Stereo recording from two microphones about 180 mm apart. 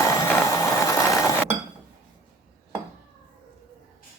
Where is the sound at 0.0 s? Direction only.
15° left (ahead or behind).